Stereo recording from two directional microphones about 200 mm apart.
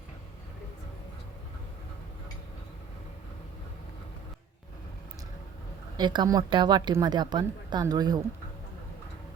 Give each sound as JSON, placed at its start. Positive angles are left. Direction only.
{"t": 6.0, "sound": "a woman's voice", "side_deg": -20}